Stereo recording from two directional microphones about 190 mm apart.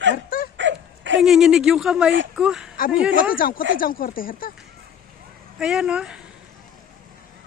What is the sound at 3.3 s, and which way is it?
Speech, 50° left (ahead or behind).